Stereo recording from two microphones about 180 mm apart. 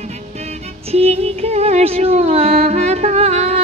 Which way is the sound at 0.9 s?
35° right (ahead or behind).